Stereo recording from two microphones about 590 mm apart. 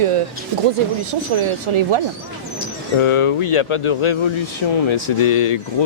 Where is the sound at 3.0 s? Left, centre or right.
Left.